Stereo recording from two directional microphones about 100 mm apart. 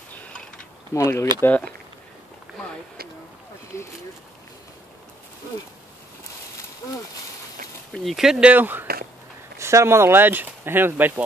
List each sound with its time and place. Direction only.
0.1 s a sound: 10° left (ahead or behind)
0.9 s speech: 30° left (ahead or behind)
3.7 s speech: 30° left (ahead or behind)
7.9 s speech: centre (ahead or behind); by 11.2 s 20° right (ahead or behind)